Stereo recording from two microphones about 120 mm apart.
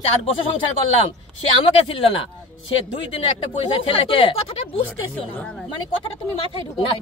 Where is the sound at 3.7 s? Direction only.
45° left (ahead or behind).